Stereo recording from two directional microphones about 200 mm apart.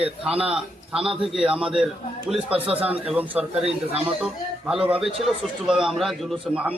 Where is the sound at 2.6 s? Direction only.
30° right (ahead or behind).